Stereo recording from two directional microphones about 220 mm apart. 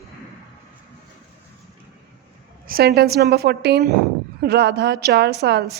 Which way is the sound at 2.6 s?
45° right (ahead or behind).